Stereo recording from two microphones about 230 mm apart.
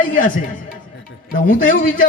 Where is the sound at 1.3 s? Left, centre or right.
Left.